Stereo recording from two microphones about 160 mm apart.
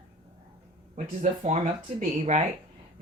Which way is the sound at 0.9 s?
50° right (ahead or behind).